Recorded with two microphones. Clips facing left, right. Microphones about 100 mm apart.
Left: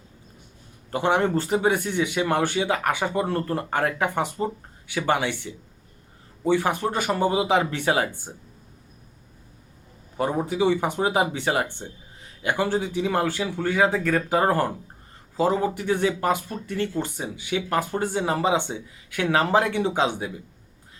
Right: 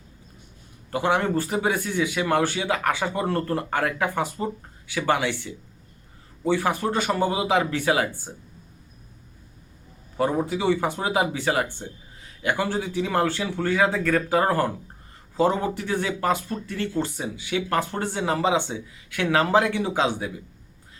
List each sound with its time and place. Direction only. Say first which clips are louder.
0.9 s speech: left 1 dB; 25° left (ahead or behind)
10.2 s speech: even; 20° left (ahead or behind)
15.4 s a man's voice: even; 5° left (ahead or behind)
15.7 s speech: left 3 dB; 20° left (ahead or behind)